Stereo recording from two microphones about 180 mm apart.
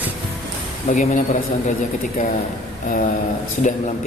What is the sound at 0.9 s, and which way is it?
Speech, 45° left (ahead or behind).